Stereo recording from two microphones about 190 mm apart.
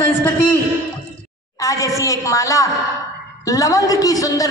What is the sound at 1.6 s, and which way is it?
A man's voice, 15° left (ahead or behind).